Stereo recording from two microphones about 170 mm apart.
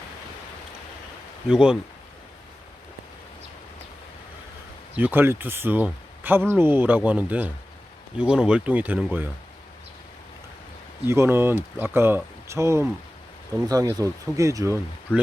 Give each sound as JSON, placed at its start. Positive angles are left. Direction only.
{"t": 1.5, "sound": "speech", "side_deg": -5}
{"t": 4.9, "sound": "speech", "side_deg": -10}
{"t": 11.0, "sound": "speech", "side_deg": -15}